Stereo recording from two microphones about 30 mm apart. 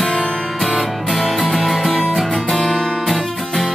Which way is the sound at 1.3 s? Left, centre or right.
Centre.